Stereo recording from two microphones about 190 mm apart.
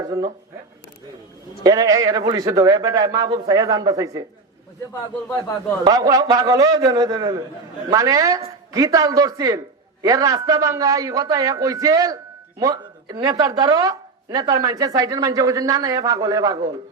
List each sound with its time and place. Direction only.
0.0 s speech: 20° right (ahead or behind)
1.6 s speech: 20° right (ahead or behind)
5.8 s a man's voice: 20° right (ahead or behind)